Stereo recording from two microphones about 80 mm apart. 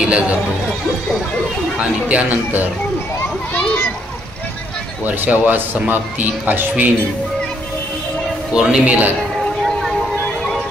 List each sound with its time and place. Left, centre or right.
0.0 s speech: centre
1.8 s speech: centre
5.0 s speech: right
8.5 s speech: centre